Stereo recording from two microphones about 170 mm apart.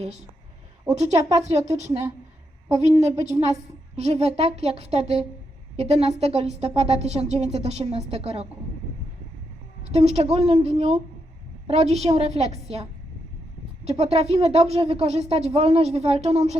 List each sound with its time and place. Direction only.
0.9 s a woman's voice: 40° right (ahead or behind)
9.9 s a woman's voice: 40° right (ahead or behind)